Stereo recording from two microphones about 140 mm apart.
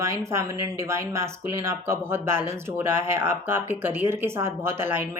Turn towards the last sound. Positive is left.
turn(degrees=-15)  # may be behind; listen again after turning